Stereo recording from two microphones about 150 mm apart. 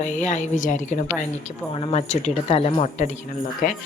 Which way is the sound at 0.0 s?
55° left (ahead or behind).